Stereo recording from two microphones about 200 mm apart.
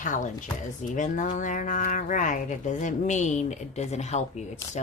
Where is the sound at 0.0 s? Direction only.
40° left (ahead or behind).